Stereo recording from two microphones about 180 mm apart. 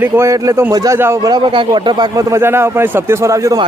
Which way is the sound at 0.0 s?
15° right (ahead or behind).